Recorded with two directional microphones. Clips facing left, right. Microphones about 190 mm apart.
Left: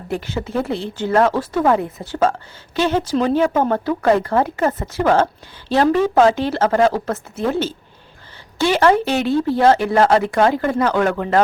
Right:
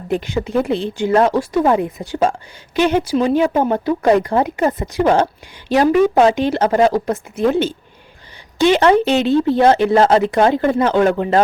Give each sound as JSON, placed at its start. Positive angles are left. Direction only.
{"t": 0.1, "sound": "speech", "side_deg": -15}